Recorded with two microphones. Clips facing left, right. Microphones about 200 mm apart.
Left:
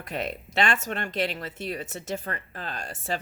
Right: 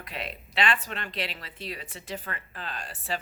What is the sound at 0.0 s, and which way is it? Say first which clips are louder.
Speech: left 6 dB; 45° left (ahead or behind).